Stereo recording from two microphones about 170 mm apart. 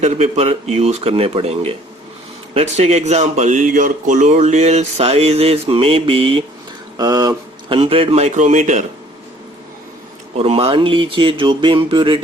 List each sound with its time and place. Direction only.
0.0 s speech: 40° right (ahead or behind)
6.9 s speech: 20° right (ahead or behind)
7.8 s speech: 35° right (ahead or behind)
10.3 s speech: 35° right (ahead or behind)